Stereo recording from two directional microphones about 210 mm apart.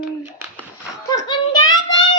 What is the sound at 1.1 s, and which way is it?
Child singing, 20° left (ahead or behind).